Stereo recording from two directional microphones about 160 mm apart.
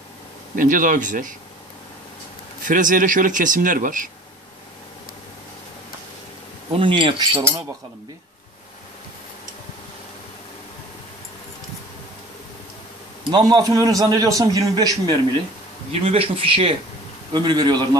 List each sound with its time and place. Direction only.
0.6 s speech: 60° right (ahead or behind)
2.6 s speech: 55° right (ahead or behind)
6.8 s speech: 30° right (ahead or behind)
13.3 s a man's voice: 25° right (ahead or behind)
15.9 s a man's voice: 35° right (ahead or behind)